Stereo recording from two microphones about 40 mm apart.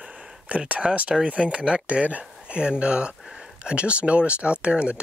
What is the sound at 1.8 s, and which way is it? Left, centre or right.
Speech, right.